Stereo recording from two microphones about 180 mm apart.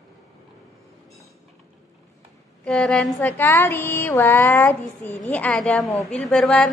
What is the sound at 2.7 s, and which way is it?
A woman's voice, 5° left (ahead or behind).